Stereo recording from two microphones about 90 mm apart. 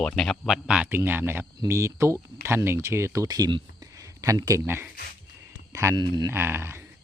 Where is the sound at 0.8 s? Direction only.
20° right (ahead or behind).